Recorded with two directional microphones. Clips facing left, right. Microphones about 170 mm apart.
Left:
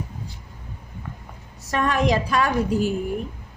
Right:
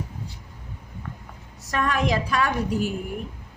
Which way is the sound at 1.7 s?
30° left (ahead or behind).